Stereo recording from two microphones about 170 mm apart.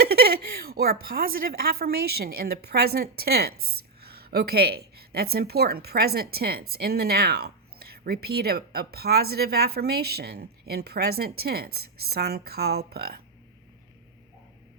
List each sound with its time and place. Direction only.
0.0 s speech: 65° right (ahead or behind)